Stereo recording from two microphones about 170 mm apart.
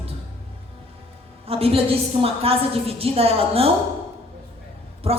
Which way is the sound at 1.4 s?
35° right (ahead or behind).